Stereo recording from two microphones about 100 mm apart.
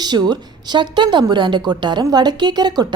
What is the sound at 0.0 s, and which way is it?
A woman's voice, 45° right (ahead or behind).